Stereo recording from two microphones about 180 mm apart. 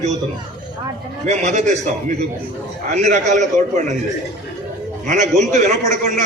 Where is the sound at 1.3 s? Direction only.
40° right (ahead or behind).